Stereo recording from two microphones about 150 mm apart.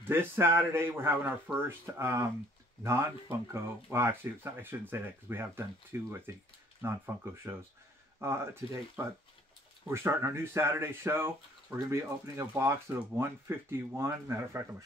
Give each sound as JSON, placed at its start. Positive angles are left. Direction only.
{"t": 0.1, "sound": "speech", "side_deg": -15}